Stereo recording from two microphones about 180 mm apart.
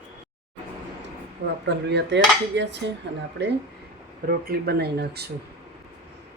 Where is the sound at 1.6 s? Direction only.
75° right (ahead or behind).